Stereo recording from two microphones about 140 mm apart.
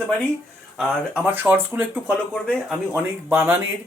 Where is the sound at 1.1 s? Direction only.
15° right (ahead or behind).